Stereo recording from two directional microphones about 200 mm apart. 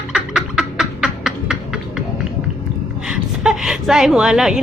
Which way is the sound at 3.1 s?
Centre (ahead or behind).